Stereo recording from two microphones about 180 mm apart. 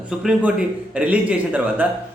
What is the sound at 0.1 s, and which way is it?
Speech, 5° right (ahead or behind).